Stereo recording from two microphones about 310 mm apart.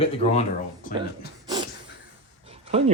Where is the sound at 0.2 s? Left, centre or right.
Left.